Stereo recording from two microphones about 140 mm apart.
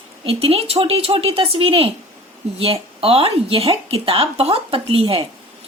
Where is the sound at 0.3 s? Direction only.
45° right (ahead or behind).